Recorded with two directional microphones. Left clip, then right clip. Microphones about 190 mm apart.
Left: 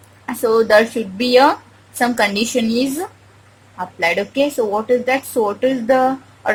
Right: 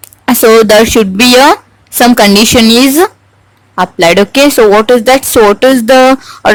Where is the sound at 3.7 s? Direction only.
45° right (ahead or behind).